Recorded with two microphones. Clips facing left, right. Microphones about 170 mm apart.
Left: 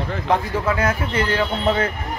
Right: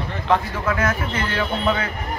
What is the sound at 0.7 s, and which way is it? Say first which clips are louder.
Speech: left 2 dB; 30° left (ahead or behind).